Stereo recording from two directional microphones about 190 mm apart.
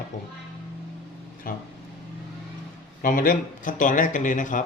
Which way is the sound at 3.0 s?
45° left (ahead or behind).